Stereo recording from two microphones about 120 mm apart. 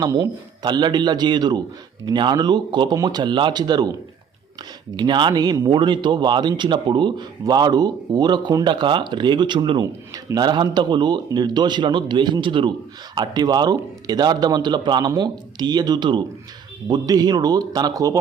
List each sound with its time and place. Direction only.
0.0 s speech: 35° right (ahead or behind)
4.9 s speech: 40° right (ahead or behind)